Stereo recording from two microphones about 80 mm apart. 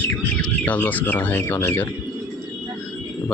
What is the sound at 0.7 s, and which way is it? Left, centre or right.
Speech, left.